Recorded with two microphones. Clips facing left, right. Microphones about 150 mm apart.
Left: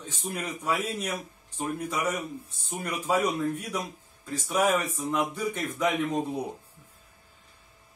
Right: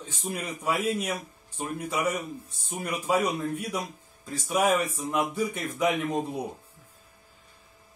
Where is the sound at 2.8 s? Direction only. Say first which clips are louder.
Right 1 dB; 10° right (ahead or behind).